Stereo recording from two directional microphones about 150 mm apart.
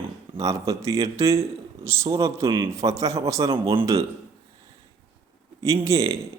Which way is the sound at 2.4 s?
35° right (ahead or behind).